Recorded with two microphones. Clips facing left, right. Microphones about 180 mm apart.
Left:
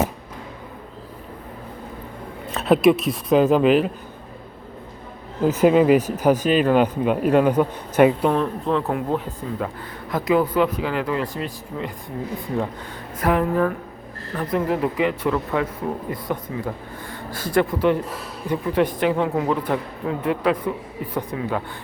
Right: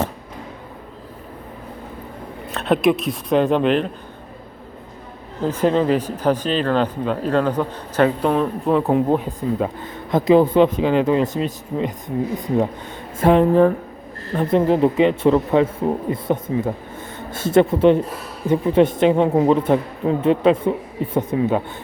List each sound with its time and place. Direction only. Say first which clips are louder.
2.5 s speech: left 1 dB; centre (ahead or behind)
5.4 s speech: left 2 dB; 10° left (ahead or behind)
8.3 s speech: right 3 dB; 10° right (ahead or behind)
8.9 s speech: right 6 dB; 20° right (ahead or behind)
13.1 s speech: right 6 dB; 25° right (ahead or behind)